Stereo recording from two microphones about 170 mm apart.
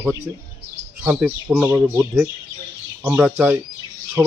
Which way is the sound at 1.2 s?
10° right (ahead or behind).